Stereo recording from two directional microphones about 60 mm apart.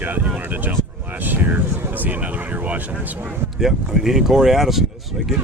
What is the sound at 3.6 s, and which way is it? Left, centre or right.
Speech, centre.